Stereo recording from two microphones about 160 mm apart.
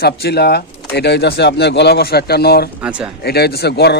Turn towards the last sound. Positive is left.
turn(degrees=90)